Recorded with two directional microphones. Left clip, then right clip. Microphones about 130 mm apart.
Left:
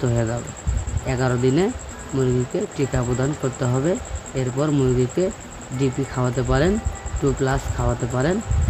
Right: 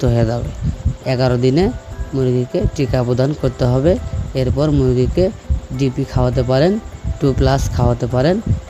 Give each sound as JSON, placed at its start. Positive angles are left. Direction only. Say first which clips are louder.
{"t": 0.0, "sound": "speech", "louder": "right 6 dB", "side_deg": -60}
{"t": 2.1, "sound": "speech", "louder": "right 4 dB", "side_deg": -35}
{"t": 2.5, "sound": "speech", "louder": "right 5 dB", "side_deg": -60}